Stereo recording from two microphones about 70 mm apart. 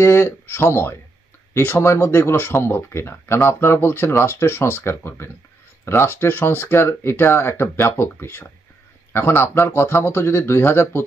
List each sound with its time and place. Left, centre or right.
0.0 s speech: left